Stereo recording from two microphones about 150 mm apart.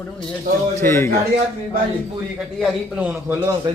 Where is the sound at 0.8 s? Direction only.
15° left (ahead or behind).